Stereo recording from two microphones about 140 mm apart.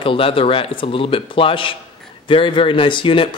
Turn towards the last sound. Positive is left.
turn(degrees=35)  # may be behind; listen again after turning